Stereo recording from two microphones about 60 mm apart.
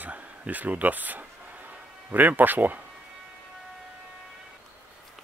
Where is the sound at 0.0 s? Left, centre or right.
Right.